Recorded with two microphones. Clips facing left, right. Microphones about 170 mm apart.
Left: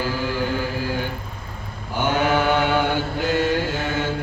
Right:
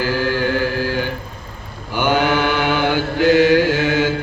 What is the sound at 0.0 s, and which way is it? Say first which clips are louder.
Chant: right 5 dB; 85° right.